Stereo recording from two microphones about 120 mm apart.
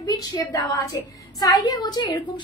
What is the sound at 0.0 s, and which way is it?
A woman's voice, 30° left (ahead or behind).